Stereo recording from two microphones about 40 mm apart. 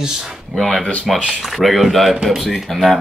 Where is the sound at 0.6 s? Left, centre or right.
Centre.